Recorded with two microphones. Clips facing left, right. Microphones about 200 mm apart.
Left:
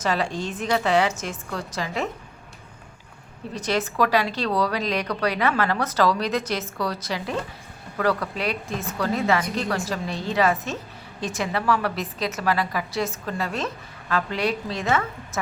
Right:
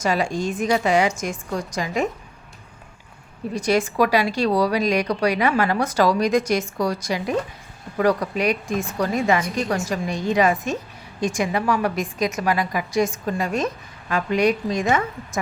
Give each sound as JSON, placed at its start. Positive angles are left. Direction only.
{"t": 0.0, "sound": "a woman's voice", "side_deg": -10}
{"t": 3.5, "sound": "a woman's voice", "side_deg": -10}